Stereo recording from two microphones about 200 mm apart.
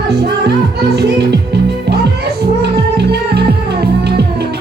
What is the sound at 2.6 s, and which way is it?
Music, 55° right (ahead or behind).